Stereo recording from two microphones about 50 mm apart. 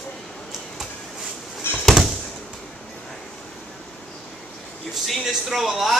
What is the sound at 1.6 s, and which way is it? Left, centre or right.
Basketball bounce, left.